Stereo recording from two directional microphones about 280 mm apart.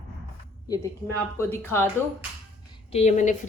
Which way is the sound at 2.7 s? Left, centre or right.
Left.